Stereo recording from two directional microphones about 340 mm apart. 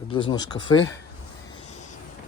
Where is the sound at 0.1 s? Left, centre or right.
Centre.